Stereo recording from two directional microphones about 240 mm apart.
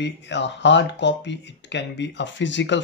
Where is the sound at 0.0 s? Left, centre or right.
Left.